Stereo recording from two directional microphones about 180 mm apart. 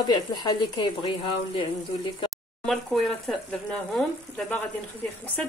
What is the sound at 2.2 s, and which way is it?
Speech, centre (ahead or behind).